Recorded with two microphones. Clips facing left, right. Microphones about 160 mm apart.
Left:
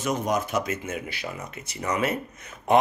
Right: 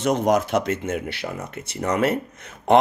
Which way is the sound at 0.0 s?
75° right (ahead or behind).